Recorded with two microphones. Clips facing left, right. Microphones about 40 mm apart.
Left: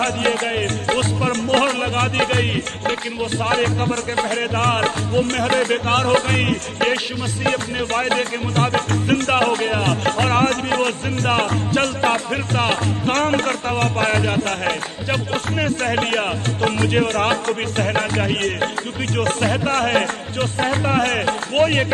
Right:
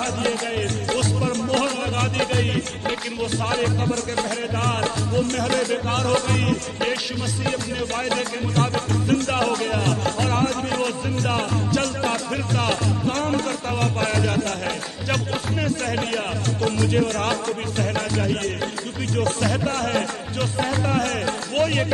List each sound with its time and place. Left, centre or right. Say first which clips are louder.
0.0 s music: left 5 dB; left
2.5 s music: left 3 dB; left
13.0 s music: left 7 dB; left